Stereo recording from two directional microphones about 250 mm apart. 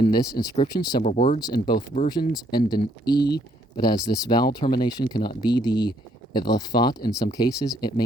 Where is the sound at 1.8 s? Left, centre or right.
Left.